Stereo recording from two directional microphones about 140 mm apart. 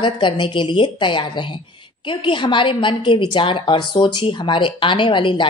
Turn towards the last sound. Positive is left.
turn(degrees=35)  # may be behind; listen again after turning